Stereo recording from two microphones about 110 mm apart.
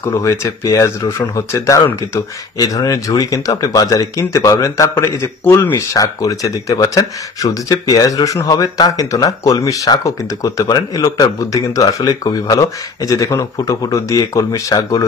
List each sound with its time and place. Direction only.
0.0 s speech: 25° left (ahead or behind)